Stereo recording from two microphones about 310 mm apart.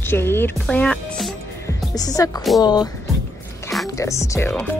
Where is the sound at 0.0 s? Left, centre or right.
Centre.